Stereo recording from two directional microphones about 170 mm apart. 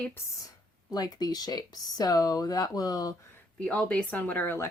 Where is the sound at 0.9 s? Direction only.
25° left (ahead or behind).